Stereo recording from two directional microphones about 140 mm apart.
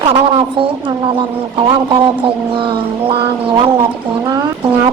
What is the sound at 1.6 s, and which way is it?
Mantra, 40° right (ahead or behind).